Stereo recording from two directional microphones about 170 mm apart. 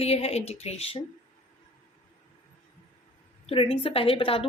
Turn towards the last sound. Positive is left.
turn(degrees=35)  # may be behind; listen again after turning